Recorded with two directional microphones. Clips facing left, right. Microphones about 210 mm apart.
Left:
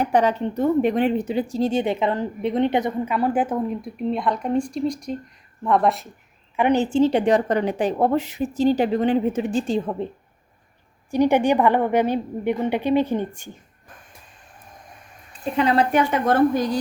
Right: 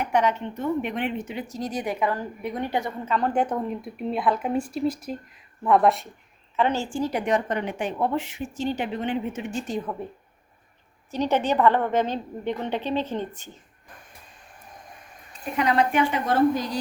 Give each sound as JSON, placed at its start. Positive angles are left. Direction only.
{"t": 0.0, "sound": "speech", "side_deg": 35}
{"t": 6.6, "sound": "speech", "side_deg": 15}
{"t": 11.1, "sound": "a woman's voice", "side_deg": 15}
{"t": 15.5, "sound": "speech", "side_deg": 30}